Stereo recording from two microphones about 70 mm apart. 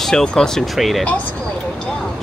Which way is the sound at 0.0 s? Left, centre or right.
Centre.